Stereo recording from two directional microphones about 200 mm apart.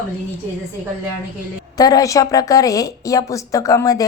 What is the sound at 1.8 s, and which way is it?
A woman's voice, 20° left (ahead or behind).